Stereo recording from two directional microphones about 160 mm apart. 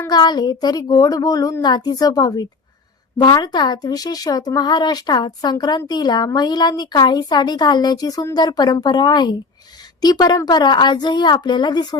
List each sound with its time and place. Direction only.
0.1 s speech: 25° left (ahead or behind)